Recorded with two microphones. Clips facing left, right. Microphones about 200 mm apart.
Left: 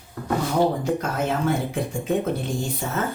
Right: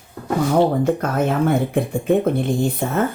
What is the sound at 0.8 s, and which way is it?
Speech, 55° right (ahead or behind).